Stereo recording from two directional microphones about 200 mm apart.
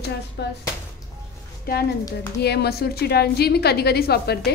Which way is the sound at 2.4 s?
55° left (ahead or behind).